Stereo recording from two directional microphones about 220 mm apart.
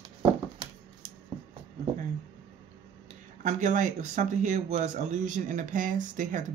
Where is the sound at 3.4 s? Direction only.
35° right (ahead or behind).